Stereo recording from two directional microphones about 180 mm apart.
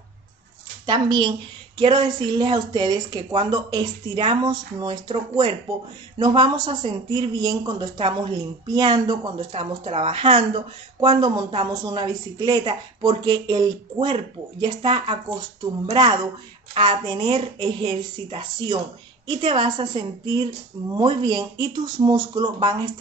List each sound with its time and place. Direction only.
0.8 s speech: 25° right (ahead or behind)